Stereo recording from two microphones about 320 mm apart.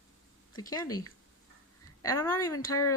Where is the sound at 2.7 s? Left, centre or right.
Left.